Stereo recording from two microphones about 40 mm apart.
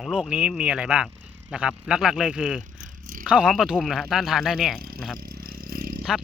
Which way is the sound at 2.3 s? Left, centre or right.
Right.